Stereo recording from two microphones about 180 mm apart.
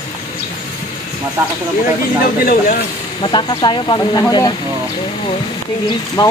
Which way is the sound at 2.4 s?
50° left (ahead or behind).